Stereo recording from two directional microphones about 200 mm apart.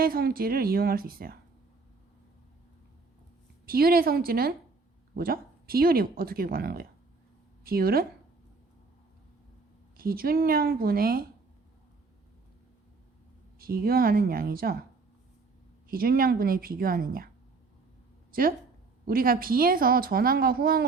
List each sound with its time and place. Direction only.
0.0 s a woman's voice: 50° right (ahead or behind)
3.7 s a woman's voice: 50° right (ahead or behind)
10.0 s a woman's voice: 50° right (ahead or behind)
13.6 s a woman's voice: 50° right (ahead or behind)
15.9 s a woman's voice: 45° right (ahead or behind)
18.3 s a sound: 45° right (ahead or behind)
19.0 s a woman's voice: 45° right (ahead or behind)